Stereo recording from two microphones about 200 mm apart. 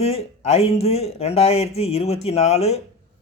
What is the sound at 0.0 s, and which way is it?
Speech, 30° left (ahead or behind).